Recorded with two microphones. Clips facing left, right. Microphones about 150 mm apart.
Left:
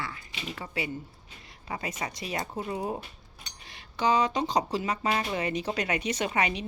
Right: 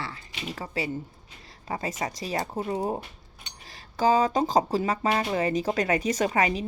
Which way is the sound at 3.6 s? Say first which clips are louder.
Right 4 dB; 40° right (ahead or behind).